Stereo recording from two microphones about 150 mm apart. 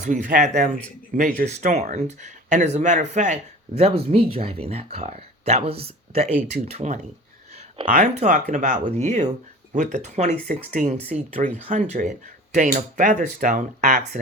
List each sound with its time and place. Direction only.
0.0 s speech: 60° right (ahead or behind)
7.5 s a sound: 45° right (ahead or behind)
7.9 s speech: 55° right (ahead or behind)